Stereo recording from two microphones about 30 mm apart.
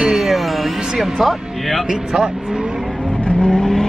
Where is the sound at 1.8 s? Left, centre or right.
Right.